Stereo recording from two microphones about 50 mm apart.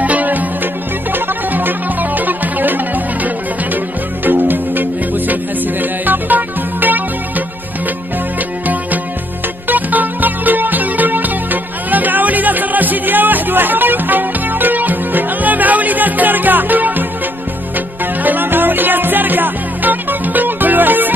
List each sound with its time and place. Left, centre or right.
0.0 s music: right
9.7 s music: right